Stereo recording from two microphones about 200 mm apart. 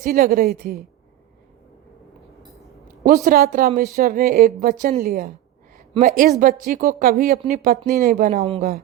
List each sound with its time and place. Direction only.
0.0 s speech: 45° right (ahead or behind)
3.2 s speech: 45° right (ahead or behind)